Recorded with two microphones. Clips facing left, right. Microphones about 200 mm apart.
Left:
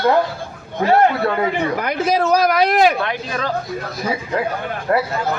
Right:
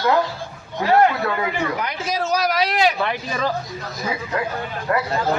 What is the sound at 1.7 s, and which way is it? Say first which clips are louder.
Speech: left 7 dB; 55° left (ahead or behind).